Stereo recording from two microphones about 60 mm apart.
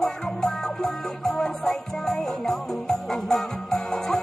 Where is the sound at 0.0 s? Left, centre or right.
Centre.